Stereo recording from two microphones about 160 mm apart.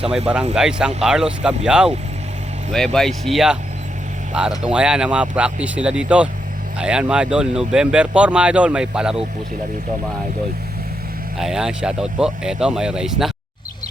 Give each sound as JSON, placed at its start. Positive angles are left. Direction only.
{"t": 0.5, "sound": "speech", "side_deg": -5}
{"t": 11.3, "sound": "speech", "side_deg": -5}